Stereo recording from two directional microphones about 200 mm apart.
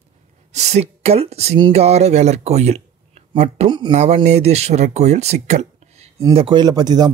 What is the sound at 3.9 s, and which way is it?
Speech, 35° right (ahead or behind).